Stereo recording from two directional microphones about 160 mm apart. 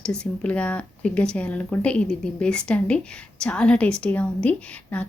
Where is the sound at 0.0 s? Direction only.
5° left (ahead or behind).